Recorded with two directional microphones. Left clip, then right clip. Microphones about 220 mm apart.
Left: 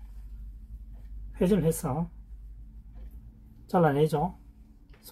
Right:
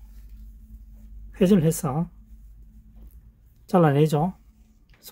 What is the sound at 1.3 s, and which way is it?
Speech, 50° right (ahead or behind).